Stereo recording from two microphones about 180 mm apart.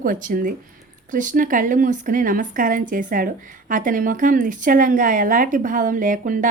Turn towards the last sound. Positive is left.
turn(degrees=-50)  # may be behind; listen again after turning